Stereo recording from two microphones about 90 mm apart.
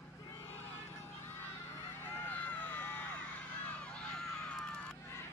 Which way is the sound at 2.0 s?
20° left (ahead or behind).